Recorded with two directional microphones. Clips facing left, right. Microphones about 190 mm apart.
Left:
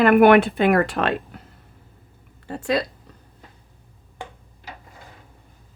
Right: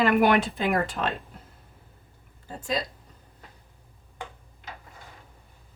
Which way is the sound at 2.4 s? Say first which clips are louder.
Left 7 dB; 70° left (ahead or behind).